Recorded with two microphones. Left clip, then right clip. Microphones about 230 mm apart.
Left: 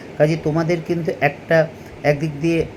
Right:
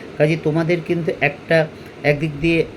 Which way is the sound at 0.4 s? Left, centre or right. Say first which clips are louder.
Right 1 dB; centre.